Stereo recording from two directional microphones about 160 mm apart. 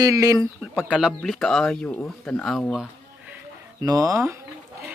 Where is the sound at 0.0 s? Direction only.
20° right (ahead or behind).